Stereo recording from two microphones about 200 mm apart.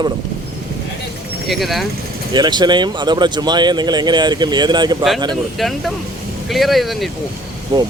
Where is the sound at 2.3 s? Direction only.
20° right (ahead or behind).